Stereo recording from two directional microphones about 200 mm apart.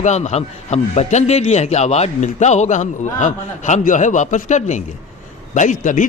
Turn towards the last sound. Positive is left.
turn(degrees=40)  # may be behind; listen again after turning